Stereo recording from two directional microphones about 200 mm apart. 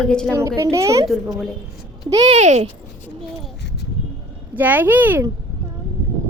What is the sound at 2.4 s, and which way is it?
Speech, 35° right (ahead or behind).